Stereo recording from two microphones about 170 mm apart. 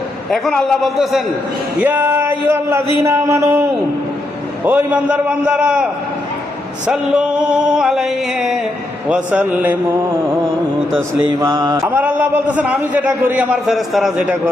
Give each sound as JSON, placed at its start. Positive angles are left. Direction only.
{"t": 0.3, "sound": "a sound", "side_deg": 0}
{"t": 1.8, "sound": "a man's voice", "side_deg": -10}
{"t": 4.6, "sound": "a man's voice", "side_deg": -10}
{"t": 6.8, "sound": "a sound", "side_deg": -5}
{"t": 9.0, "sound": "a man's voice", "side_deg": -10}
{"t": 11.3, "sound": "a man's voice", "side_deg": -20}